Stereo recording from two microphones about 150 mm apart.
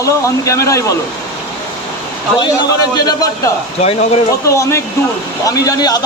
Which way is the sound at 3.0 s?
25° left (ahead or behind).